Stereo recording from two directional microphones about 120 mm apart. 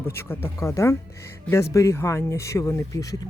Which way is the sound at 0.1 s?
20° left (ahead or behind).